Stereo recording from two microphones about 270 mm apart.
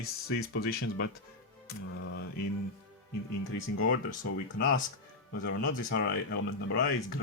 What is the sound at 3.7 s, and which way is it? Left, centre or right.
Speech, left.